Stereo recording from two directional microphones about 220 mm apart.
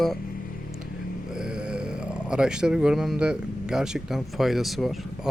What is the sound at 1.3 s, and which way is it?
Speech, 5° right (ahead or behind).